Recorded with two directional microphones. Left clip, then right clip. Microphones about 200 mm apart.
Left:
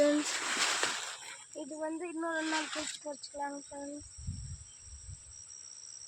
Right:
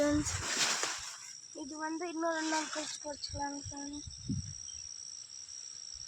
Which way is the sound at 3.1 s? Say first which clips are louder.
Even; 30° left (ahead or behind).